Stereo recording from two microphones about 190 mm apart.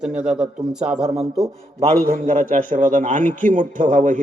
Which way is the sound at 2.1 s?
40° right (ahead or behind).